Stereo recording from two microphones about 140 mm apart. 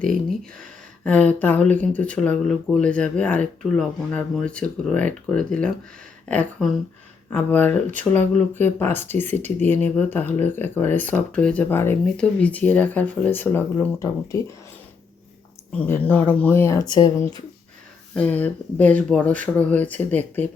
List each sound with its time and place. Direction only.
0.0 s speech: 5° left (ahead or behind); by 14.4 s 20° left (ahead or behind)
15.8 s speech: 10° left (ahead or behind); by 17.1 s 30° left (ahead or behind)
18.1 s speech: 10° left (ahead or behind)